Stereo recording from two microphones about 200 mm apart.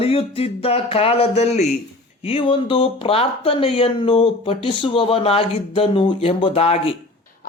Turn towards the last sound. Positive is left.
turn(degrees=30)  # may be behind; listen again after turning